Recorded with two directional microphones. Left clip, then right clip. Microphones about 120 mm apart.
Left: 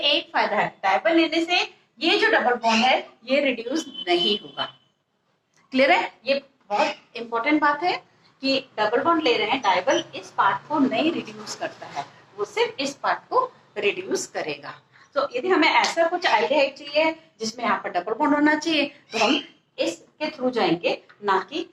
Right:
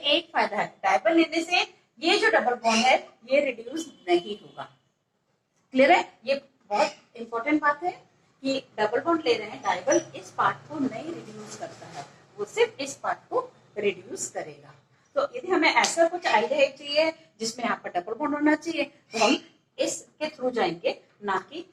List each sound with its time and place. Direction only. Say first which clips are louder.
0.0 s a woman's voice: left 3 dB; 30° left (ahead or behind)
5.7 s a woman's voice: left 1 dB; 35° left (ahead or behind)